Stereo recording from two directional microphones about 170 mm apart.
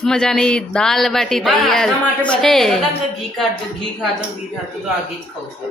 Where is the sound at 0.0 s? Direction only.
5° left (ahead or behind).